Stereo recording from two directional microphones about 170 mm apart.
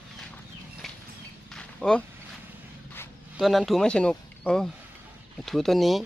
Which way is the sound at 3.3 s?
Centre (ahead or behind).